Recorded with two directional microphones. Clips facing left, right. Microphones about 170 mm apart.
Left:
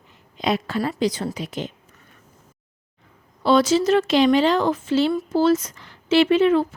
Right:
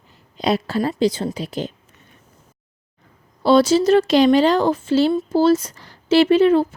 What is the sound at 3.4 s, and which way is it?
Speech, 35° right (ahead or behind).